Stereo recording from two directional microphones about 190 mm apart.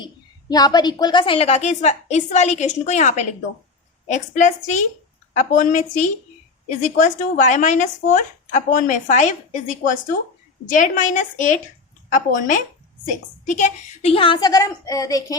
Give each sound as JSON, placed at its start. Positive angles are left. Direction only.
{"t": 0.0, "sound": "a woman's voice", "side_deg": 20}